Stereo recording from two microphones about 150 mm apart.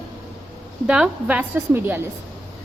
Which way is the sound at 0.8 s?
5° right (ahead or behind).